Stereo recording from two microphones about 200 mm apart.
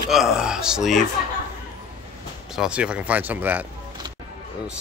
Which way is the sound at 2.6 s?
5° right (ahead or behind).